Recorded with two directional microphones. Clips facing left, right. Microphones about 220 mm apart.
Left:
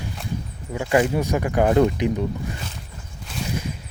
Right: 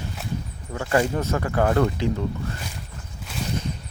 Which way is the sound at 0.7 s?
15° left (ahead or behind).